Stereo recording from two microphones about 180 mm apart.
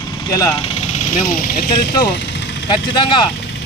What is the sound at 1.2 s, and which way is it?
Speech, 55° left (ahead or behind).